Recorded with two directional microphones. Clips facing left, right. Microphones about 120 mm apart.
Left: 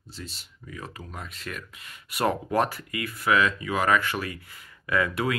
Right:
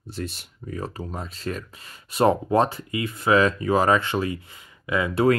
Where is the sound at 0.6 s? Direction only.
35° right (ahead or behind); by 5.2 s 20° right (ahead or behind).